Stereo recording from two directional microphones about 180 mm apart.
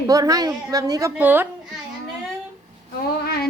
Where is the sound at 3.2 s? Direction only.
60° left (ahead or behind).